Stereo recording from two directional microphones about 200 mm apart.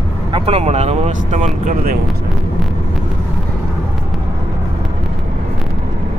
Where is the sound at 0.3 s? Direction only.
30° right (ahead or behind).